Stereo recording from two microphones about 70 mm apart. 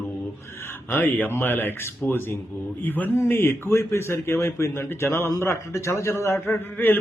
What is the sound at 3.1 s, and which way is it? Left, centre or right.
A man's voice, left.